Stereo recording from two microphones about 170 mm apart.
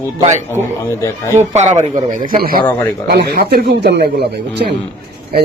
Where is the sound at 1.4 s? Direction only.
40° right (ahead or behind); by 4.8 s 70° right (ahead or behind).